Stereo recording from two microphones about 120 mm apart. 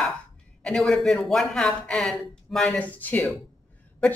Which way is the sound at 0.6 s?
5° left (ahead or behind).